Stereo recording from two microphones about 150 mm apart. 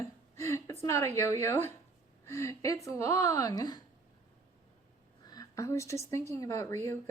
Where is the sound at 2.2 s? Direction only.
20° left (ahead or behind).